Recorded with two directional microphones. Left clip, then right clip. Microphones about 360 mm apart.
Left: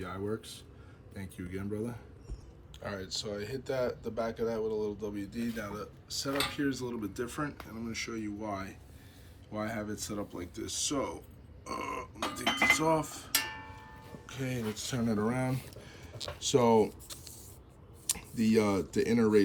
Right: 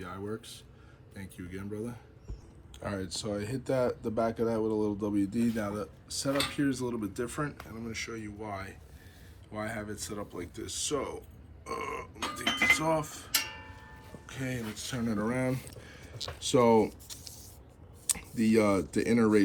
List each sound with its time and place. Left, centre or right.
0.0 s speech: centre